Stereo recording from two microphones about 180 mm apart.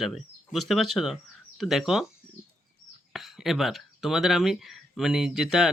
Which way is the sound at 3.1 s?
Centre (ahead or behind).